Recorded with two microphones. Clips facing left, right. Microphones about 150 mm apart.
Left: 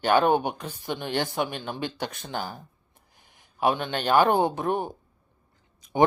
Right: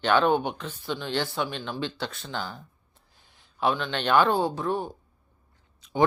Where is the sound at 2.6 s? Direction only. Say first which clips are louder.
Left 1 dB; 15° left (ahead or behind).